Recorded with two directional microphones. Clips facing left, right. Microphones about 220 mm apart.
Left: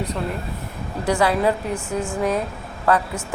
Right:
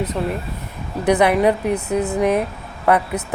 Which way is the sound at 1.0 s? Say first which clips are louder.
Right 4 dB; 20° right (ahead or behind).